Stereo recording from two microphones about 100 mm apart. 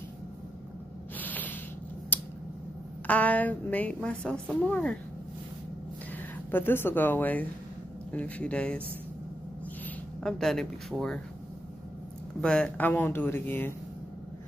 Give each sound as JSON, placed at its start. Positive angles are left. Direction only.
{"t": 1.1, "sound": "spray", "side_deg": 15}
{"t": 2.1, "sound": "a sound", "side_deg": 20}
{"t": 3.1, "sound": "a woman's voice", "side_deg": 15}
{"t": 6.5, "sound": "a woman's voice", "side_deg": 20}
{"t": 10.2, "sound": "speech", "side_deg": 5}
{"t": 12.4, "sound": "a woman's voice", "side_deg": 10}